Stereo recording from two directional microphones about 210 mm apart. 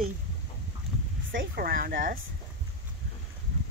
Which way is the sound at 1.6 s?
45° right (ahead or behind).